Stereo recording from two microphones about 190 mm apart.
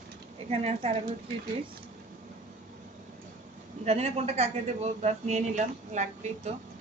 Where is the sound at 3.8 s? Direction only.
35° right (ahead or behind).